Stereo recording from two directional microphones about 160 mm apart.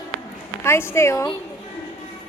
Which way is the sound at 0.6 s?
15° left (ahead or behind).